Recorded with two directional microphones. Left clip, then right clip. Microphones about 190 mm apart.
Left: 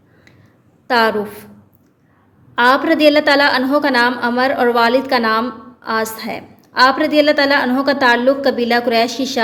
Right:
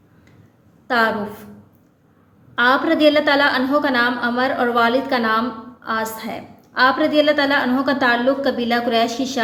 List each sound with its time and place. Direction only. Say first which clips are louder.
0.9 s a woman's voice: left 4 dB; 30° left (ahead or behind)
2.6 s a woman's voice: left 3 dB; 35° left (ahead or behind)